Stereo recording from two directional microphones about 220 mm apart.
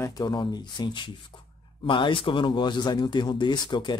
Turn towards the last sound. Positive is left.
turn(degrees=20)  # may be behind; listen again after turning